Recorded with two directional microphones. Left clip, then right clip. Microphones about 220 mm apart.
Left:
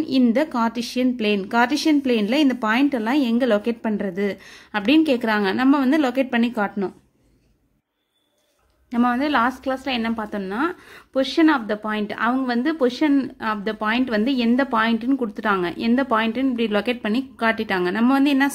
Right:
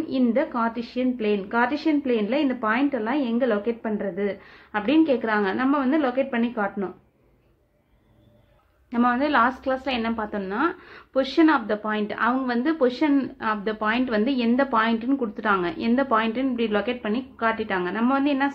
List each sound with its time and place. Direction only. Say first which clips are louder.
0.0 s speech: left 3 dB; 45° left (ahead or behind)
8.9 s a woman's voice: left 1 dB; 40° left (ahead or behind)